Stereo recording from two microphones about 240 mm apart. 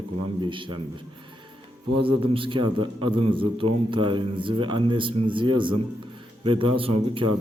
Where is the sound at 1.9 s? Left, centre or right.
Right.